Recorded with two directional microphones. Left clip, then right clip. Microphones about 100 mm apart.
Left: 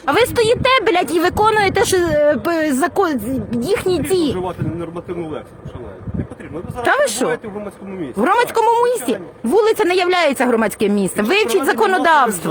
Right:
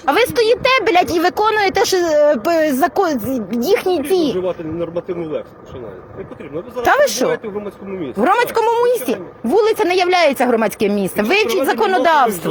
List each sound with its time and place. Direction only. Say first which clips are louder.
0.0 s speech: even; 35° left (ahead or behind)
3.3 s speech: right 3 dB; 20° left (ahead or behind)
6.8 s speech: right 2 dB; 25° left (ahead or behind)
8.0 s speech: right 1 dB; 40° left (ahead or behind)
8.3 s speech: left 1 dB; 25° left (ahead or behind)
9.4 s speech: even; 60° left (ahead or behind); by 11.4 s 30° left (ahead or behind)
11.8 s speech: even; 45° left (ahead or behind)